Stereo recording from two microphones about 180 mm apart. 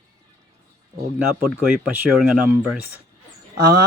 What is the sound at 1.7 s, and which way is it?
Speech, 5° right (ahead or behind).